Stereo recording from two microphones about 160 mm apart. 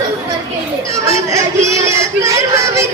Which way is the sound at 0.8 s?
20° right (ahead or behind).